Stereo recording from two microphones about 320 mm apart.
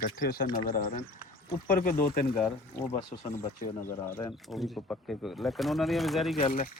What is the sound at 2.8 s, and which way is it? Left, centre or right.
Speech, centre.